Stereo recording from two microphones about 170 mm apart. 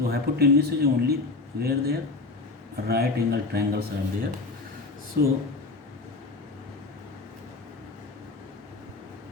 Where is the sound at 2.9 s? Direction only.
70° right (ahead or behind).